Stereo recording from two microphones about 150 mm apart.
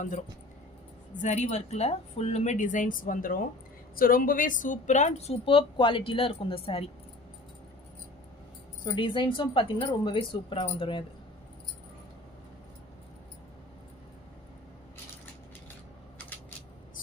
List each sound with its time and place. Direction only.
1.2 s a woman's voice: 50° left (ahead or behind)
8.8 s speech: 30° left (ahead or behind)